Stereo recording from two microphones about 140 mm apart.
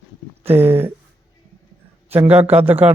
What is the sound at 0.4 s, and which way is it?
Speech, 15° right (ahead or behind).